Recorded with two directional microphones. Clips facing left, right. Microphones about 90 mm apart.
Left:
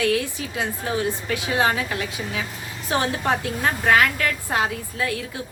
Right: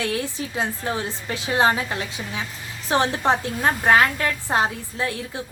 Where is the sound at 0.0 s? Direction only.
30° right (ahead or behind).